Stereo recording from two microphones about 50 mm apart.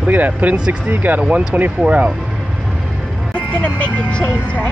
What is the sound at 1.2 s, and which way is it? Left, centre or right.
Speech, centre.